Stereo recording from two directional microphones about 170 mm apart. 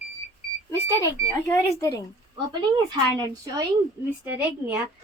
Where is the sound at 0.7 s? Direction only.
15° left (ahead or behind).